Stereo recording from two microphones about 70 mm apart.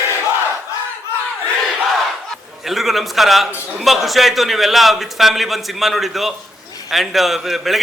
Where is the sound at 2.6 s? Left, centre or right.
Centre.